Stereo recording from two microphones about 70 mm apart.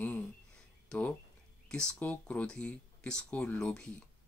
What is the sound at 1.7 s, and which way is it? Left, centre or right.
Speech, centre.